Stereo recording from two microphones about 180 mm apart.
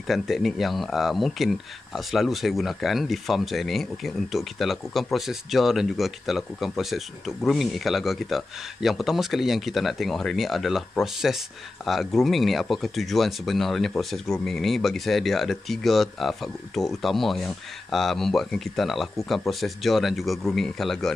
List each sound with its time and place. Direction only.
0.0 s speech: centre (ahead or behind)